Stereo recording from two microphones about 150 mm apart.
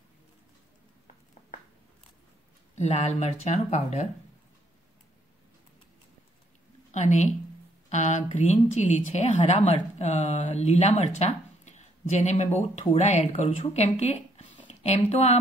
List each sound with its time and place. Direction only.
2.8 s speech: 45° left (ahead or behind)
6.9 s a woman's voice: 50° left (ahead or behind)